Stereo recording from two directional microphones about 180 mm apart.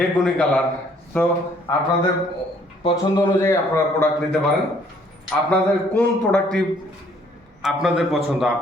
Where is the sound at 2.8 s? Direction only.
20° left (ahead or behind).